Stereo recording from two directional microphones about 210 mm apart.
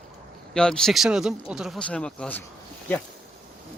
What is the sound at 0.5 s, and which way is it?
Speech, 5° left (ahead or behind).